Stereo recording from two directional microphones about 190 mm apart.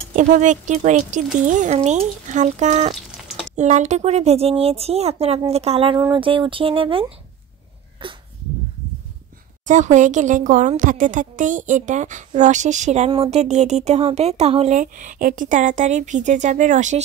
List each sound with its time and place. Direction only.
0.1 s speech: 40° right (ahead or behind)
8.0 s dog: 30° right (ahead or behind)
9.7 s speech: 40° right (ahead or behind)